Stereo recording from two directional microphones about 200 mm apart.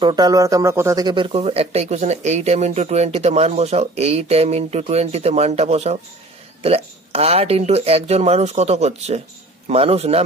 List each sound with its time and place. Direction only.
0.0 s speech: 20° right (ahead or behind)